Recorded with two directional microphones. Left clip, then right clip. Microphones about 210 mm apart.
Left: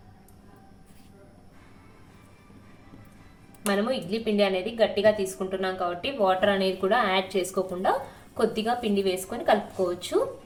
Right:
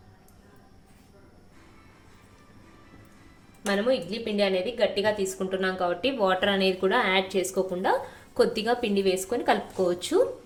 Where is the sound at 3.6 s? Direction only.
25° right (ahead or behind).